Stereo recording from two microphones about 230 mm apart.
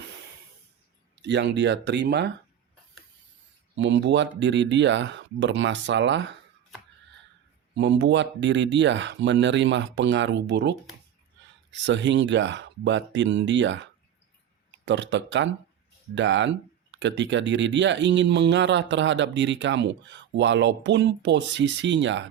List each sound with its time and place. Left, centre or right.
1.2 s speech: right
3.8 s speech: right
7.8 s speech: right
14.8 s speech: right